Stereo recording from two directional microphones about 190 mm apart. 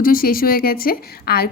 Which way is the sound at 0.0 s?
50° left (ahead or behind).